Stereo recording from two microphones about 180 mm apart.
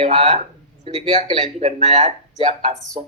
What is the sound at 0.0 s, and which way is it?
A man's voice, 35° right (ahead or behind).